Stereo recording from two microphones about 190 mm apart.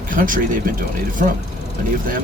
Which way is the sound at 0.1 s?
45° right (ahead or behind).